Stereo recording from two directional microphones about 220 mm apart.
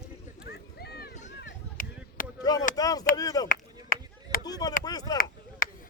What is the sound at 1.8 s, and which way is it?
Chop, 40° left (ahead or behind).